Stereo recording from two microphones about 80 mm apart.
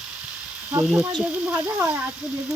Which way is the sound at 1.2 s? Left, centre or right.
Centre.